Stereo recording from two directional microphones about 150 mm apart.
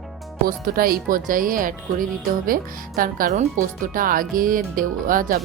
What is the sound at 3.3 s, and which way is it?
Speech, 55° right (ahead or behind).